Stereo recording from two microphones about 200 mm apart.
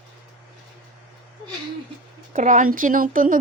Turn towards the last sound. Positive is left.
turn(degrees=-45)  # may be behind; listen again after turning